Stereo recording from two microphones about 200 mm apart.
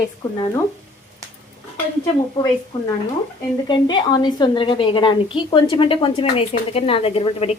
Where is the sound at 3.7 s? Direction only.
20° left (ahead or behind).